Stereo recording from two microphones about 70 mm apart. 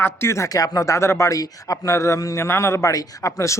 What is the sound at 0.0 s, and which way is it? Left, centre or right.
Speech, left.